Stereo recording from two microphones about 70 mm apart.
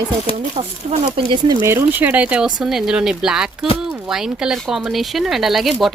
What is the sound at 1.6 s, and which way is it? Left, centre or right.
Speech, right.